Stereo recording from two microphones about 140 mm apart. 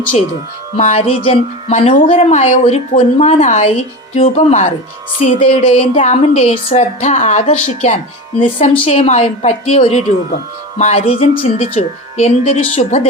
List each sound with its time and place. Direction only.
0.9 s a woman's voice: 40° left (ahead or behind)
5.4 s a woman's voice: 45° left (ahead or behind)
8.8 s a woman's voice: 50° left (ahead or behind)